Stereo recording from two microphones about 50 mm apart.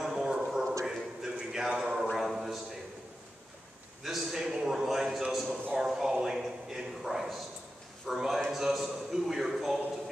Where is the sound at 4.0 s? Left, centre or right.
Centre.